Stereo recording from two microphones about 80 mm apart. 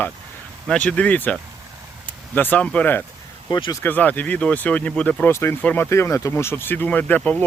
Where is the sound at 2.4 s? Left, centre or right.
Left.